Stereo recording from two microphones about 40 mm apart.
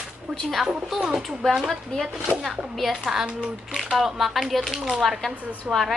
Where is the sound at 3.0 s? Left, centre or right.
Centre.